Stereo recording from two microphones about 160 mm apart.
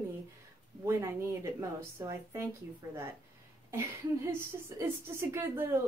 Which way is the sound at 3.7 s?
15° right (ahead or behind).